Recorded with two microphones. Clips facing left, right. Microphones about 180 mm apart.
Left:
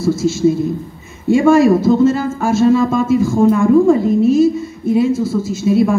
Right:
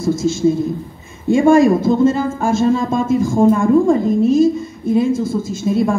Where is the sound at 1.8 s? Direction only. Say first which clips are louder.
Left 2 dB; 50° right (ahead or behind).